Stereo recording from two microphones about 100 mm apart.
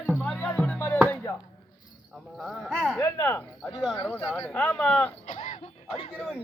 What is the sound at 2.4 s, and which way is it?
Speech, 5° left (ahead or behind).